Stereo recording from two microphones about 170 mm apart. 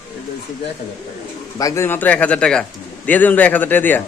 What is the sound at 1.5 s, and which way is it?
A man's voice, 20° left (ahead or behind).